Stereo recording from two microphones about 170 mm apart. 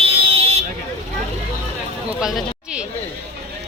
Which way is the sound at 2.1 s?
5° right (ahead or behind).